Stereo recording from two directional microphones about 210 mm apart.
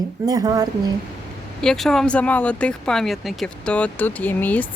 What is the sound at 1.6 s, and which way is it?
Speech, centre (ahead or behind).